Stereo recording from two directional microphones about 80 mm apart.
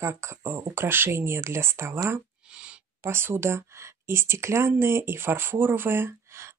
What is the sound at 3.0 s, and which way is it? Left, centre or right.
Speech, right.